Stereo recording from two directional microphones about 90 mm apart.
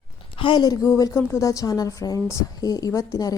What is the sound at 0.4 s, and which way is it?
A woman's voice, 50° left (ahead or behind).